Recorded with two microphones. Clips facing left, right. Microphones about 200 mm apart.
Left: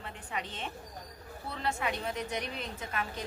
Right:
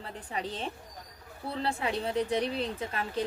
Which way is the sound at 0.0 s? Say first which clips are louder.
Right 3 dB; 35° right (ahead or behind).